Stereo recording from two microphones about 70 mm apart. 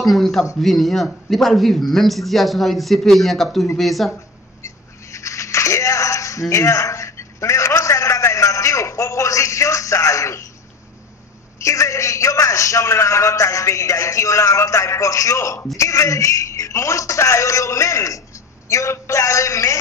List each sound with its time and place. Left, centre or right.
0.0 s speech: centre
4.6 s a sound: left
6.5 s a man's voice: left
11.6 s a man's voice: left